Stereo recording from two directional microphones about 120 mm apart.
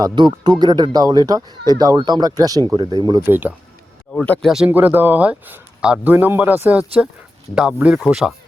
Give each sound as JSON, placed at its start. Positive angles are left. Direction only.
{"t": 0.0, "sound": "speech", "side_deg": -40}
{"t": 3.2, "sound": "speech", "side_deg": -20}
{"t": 4.1, "sound": "speech", "side_deg": 10}
{"t": 4.5, "sound": "speech", "side_deg": -10}